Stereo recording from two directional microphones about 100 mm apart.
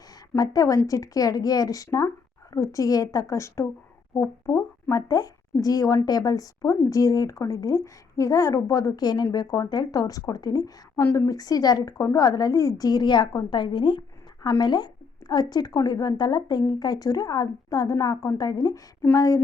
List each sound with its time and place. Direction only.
0.3 s speech: 35° left (ahead or behind)
4.9 s speech: 40° left (ahead or behind)